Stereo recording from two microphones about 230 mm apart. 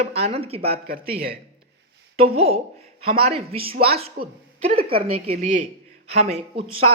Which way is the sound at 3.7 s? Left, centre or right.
Right.